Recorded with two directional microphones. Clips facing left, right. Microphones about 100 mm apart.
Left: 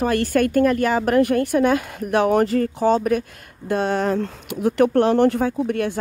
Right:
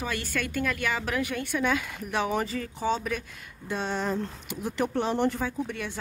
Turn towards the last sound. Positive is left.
turn(degrees=55)  # may be behind; listen again after turning